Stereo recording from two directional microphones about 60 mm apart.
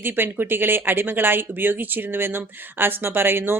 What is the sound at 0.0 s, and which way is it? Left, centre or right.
Speech, right.